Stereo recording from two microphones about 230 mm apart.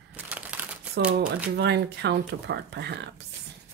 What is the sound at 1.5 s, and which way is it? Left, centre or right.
Speech, right.